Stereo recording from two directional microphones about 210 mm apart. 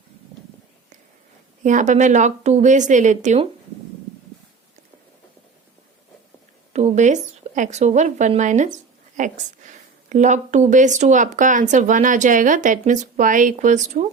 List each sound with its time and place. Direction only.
1.6 s speech: 35° right (ahead or behind)
6.7 s speech: 35° right (ahead or behind)